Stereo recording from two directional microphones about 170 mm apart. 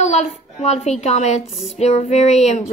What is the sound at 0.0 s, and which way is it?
A woman's voice, 40° left (ahead or behind).